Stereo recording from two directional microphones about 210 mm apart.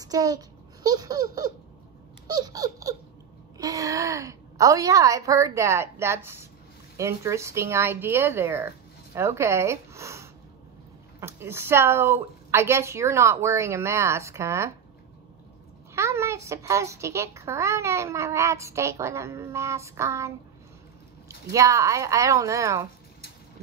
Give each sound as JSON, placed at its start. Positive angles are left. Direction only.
{"t": 0.0, "sound": "a child's voice", "side_deg": -15}
{"t": 15.9, "sound": "a child's voice", "side_deg": -15}